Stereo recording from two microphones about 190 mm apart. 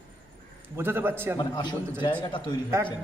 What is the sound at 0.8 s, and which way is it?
Speech, 10° right (ahead or behind).